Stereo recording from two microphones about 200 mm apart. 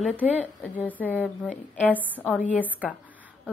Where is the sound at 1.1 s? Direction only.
10° right (ahead or behind).